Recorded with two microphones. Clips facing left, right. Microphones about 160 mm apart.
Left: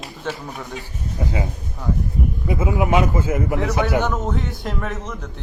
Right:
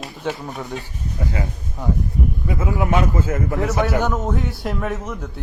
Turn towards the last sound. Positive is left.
turn(degrees=0)  # may be behind; listen again after turning